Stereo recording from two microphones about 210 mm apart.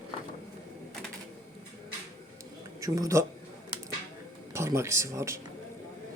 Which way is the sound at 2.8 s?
15° right (ahead or behind).